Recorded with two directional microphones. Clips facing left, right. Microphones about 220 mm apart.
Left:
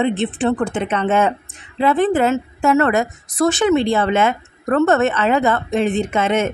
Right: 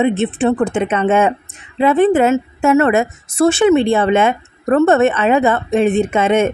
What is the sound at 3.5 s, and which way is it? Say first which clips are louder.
Speech: right 4 dB; 15° right (ahead or behind).